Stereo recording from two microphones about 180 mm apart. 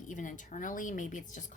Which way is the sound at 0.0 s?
45° left (ahead or behind).